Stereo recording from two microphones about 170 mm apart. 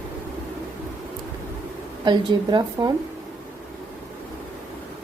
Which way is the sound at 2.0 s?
25° right (ahead or behind).